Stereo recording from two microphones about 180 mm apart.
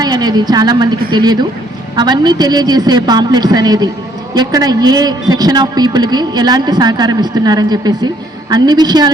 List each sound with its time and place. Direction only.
0.0 s a man's voice: 20° right (ahead or behind)